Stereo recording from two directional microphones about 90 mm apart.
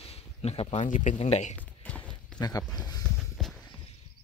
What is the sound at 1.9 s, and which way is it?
Clip-clop, 15° left (ahead or behind).